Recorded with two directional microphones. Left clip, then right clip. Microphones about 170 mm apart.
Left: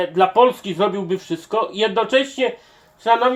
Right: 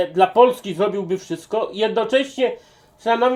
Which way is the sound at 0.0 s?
25° right (ahead or behind).